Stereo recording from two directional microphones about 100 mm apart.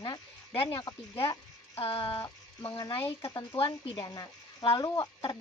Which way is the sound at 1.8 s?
65° left (ahead or behind).